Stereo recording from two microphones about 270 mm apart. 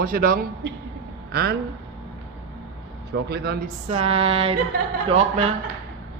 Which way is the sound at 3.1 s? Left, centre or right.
Right.